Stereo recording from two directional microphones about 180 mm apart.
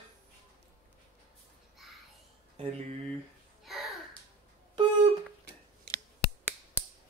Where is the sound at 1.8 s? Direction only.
Centre (ahead or behind).